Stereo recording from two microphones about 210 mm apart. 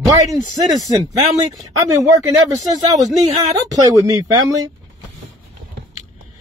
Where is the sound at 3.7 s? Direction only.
15° right (ahead or behind).